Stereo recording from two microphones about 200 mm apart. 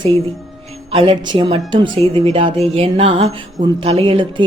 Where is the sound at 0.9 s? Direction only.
30° right (ahead or behind).